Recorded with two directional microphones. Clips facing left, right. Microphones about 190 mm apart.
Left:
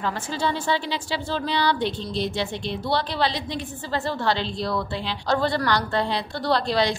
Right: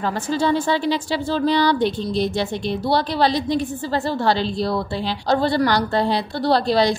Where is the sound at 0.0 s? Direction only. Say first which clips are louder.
Right 5 dB; 40° right (ahead or behind).